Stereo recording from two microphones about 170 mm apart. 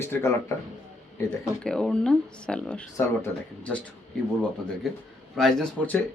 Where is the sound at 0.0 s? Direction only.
15° left (ahead or behind).